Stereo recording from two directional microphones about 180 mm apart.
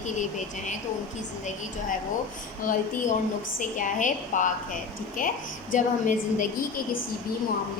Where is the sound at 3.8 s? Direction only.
45° left (ahead or behind).